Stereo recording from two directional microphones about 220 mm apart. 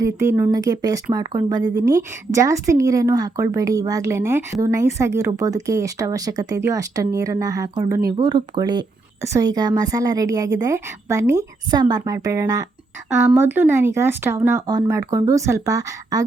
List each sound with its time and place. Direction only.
0.0 s speech: 15° right (ahead or behind)